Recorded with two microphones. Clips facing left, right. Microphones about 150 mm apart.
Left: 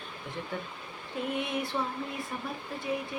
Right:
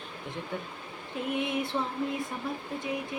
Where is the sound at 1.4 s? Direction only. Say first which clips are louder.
Right 4 dB; 20° right (ahead or behind).